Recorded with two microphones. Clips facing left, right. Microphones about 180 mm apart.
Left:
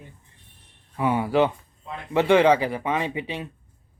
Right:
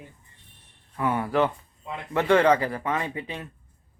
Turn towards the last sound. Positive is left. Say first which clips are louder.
# left 3 dB
turn(degrees=20)  # may be behind; listen again after turning